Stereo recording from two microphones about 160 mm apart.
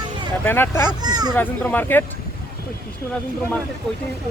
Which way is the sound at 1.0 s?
25° right (ahead or behind).